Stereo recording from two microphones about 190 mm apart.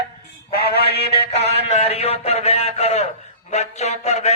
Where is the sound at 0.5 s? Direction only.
55° left (ahead or behind).